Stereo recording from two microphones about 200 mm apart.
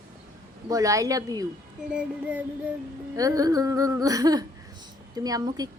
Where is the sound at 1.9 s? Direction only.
5° right (ahead or behind).